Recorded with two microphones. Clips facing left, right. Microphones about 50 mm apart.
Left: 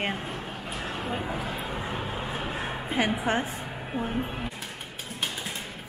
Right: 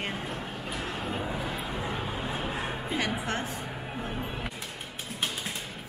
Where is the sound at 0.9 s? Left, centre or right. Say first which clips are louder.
Left 3 dB; centre.